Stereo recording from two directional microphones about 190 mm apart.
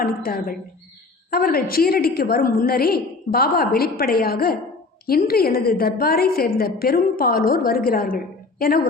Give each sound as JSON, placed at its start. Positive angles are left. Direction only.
{"t": 0.0, "sound": "a woman's voice", "side_deg": 50}